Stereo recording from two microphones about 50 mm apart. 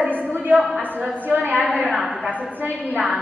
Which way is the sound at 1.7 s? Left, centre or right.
Centre.